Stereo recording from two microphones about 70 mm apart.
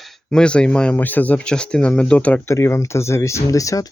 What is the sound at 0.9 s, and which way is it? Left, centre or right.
Speech, left.